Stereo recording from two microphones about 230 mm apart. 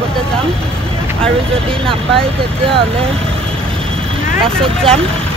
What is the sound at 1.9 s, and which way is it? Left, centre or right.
Speech, right.